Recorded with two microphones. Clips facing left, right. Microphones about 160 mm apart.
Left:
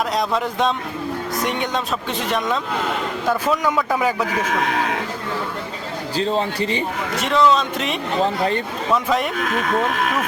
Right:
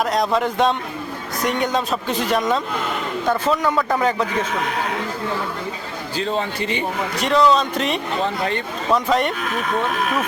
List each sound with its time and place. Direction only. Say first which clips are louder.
0.1 s speech: right 2 dB; centre (ahead or behind)
6.1 s a man's voice: left 2 dB; 35° left (ahead or behind)
7.2 s speech: right 1 dB; centre (ahead or behind)